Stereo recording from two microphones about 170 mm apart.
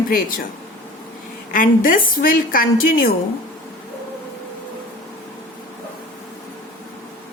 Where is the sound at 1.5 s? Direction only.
55° left (ahead or behind).